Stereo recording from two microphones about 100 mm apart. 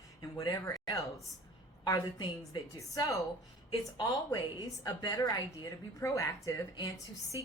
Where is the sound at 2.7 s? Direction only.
35° left (ahead or behind).